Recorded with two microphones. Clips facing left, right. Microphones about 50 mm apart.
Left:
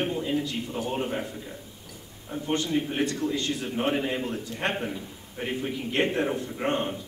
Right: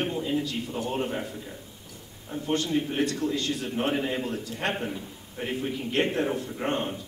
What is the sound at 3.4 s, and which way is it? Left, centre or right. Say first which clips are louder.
Speech: even; left.